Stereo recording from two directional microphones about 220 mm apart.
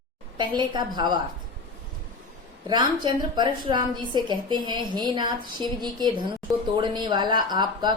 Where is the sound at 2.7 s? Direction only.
20° right (ahead or behind).